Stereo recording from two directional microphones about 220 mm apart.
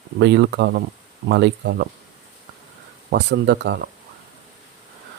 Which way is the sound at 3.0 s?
50° right (ahead or behind).